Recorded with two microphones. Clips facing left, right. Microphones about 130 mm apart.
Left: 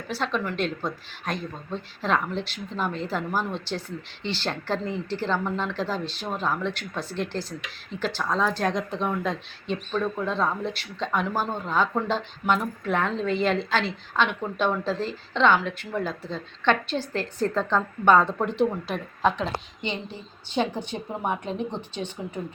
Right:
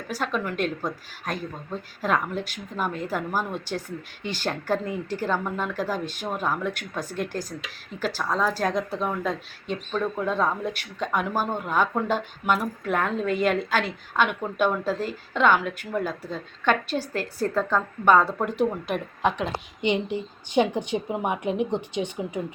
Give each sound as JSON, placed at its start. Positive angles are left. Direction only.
{"t": 0.1, "sound": "speech", "side_deg": -10}
{"t": 7.9, "sound": "speech", "side_deg": -10}